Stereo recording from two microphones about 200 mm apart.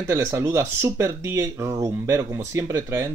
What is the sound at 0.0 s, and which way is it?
Speech, 15° right (ahead or behind).